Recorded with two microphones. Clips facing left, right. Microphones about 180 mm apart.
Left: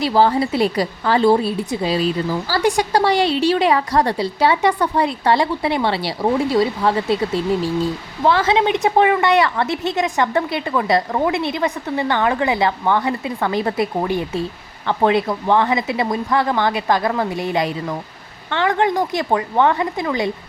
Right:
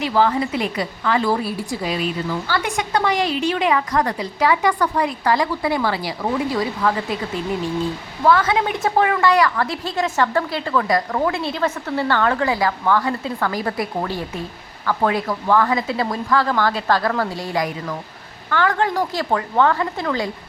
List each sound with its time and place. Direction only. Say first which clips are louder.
0.0 s a woman's voice: left 3 dB; 30° left (ahead or behind); by 20.3 s 15° left (ahead or behind)